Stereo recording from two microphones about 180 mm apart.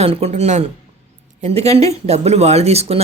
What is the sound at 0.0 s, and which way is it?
Speech, 35° right (ahead or behind).